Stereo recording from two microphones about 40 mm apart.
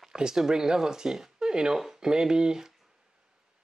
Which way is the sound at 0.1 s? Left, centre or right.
Centre.